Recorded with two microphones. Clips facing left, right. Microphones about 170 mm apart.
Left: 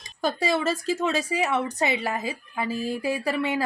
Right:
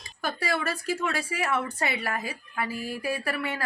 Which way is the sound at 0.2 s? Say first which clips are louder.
Left 5 dB; 25° left (ahead or behind).